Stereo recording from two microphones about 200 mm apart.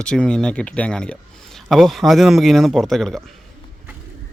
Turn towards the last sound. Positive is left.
turn(degrees=0)  # may be behind; listen again after turning